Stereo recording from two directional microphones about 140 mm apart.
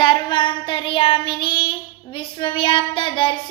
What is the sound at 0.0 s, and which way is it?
Child singing, 35° left (ahead or behind).